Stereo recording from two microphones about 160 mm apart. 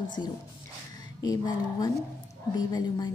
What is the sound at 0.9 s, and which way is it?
A woman's voice, 25° left (ahead or behind).